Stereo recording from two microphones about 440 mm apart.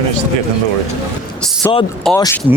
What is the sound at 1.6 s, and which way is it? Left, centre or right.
Speech, centre.